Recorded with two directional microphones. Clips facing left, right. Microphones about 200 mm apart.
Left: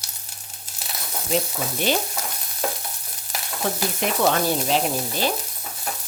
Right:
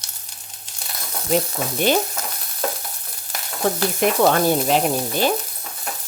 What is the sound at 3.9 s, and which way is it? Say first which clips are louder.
Speech: right 4 dB; 50° right (ahead or behind).